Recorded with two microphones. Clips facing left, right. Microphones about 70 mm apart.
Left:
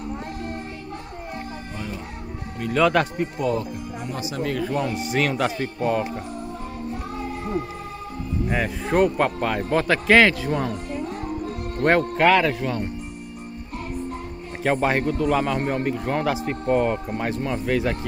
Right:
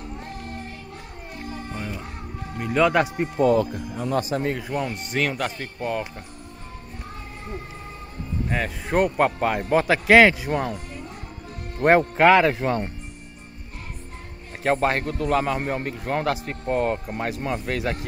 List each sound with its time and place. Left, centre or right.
2.6 s a man's voice: centre
3.2 s speech: right
3.5 s speech: right
4.2 s speech: right
4.5 s a man's voice: centre
4.9 s speech: centre
8.5 s a man's voice: centre
11.8 s a man's voice: centre
12.4 s speech: right
14.6 s speech: centre